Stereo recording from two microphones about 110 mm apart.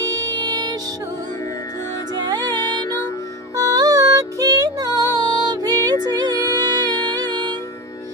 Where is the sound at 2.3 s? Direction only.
40° right (ahead or behind).